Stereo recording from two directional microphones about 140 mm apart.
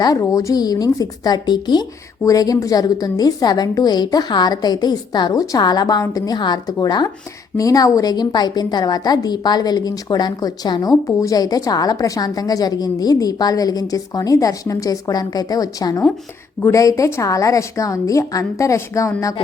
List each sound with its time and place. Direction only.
0.0 s a woman's voice: 25° left (ahead or behind)